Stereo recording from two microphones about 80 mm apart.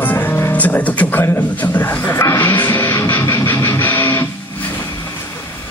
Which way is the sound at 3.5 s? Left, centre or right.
Left.